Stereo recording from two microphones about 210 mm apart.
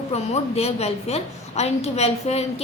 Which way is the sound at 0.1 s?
30° left (ahead or behind).